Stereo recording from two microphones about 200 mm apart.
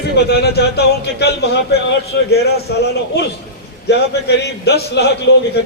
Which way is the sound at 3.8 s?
55° left (ahead or behind).